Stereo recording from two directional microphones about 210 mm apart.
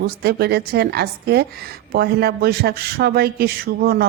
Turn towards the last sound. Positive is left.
turn(degrees=-45)  # may be behind; listen again after turning